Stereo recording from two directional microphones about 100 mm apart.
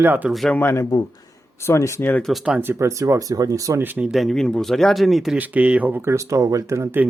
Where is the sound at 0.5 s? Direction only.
25° left (ahead or behind).